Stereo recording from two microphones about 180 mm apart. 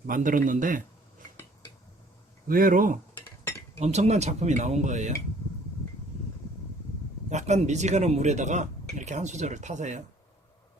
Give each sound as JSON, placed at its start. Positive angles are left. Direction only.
{"t": 0.1, "sound": "speech", "side_deg": -50}
{"t": 2.5, "sound": "speech", "side_deg": -50}
{"t": 3.8, "sound": "speech", "side_deg": -35}
{"t": 7.3, "sound": "speech", "side_deg": -40}